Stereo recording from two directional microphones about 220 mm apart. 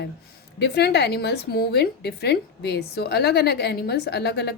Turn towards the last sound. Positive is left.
turn(degrees=50)  # may be behind; listen again after turning